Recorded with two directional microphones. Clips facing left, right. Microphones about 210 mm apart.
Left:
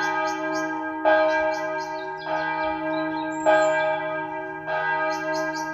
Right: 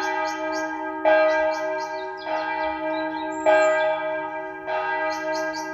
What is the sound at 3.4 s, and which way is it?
Church bell, 20° right (ahead or behind).